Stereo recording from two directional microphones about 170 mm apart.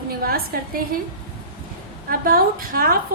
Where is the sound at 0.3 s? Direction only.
60° right (ahead or behind).